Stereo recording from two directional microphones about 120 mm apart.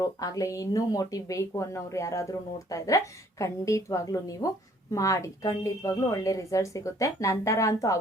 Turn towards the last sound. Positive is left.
turn(degrees=25)  # may be behind; listen again after turning